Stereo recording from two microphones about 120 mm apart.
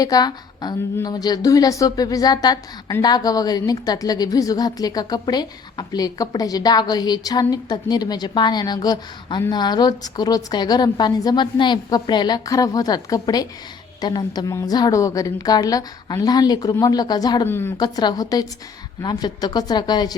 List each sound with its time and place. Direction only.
0.0 s a woman's voice: 35° left (ahead or behind)
17.4 s a woman's voice: 20° left (ahead or behind)
17.7 s a woman's voice: 35° left (ahead or behind)